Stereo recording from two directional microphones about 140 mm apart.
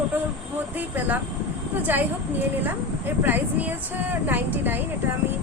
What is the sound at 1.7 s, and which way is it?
Speech, 15° right (ahead or behind).